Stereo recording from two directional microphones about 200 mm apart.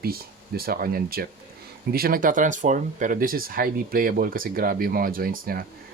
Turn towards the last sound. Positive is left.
turn(degrees=-45)  # may be behind; listen again after turning